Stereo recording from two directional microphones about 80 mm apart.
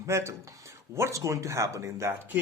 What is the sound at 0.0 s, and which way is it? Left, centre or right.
Speech, right.